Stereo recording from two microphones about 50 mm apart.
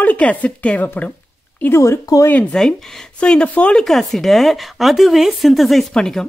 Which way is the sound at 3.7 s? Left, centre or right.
Centre.